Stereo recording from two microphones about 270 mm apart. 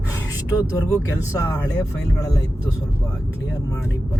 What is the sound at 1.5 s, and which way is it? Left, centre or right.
Speech, centre.